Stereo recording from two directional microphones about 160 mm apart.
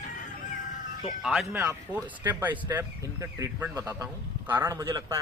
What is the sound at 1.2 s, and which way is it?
A man's voice, centre (ahead or behind).